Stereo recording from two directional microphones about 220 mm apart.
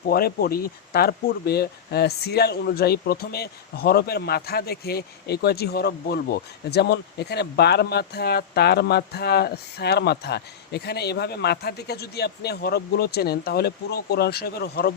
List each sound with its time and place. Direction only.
0.0 s speech: 45° left (ahead or behind)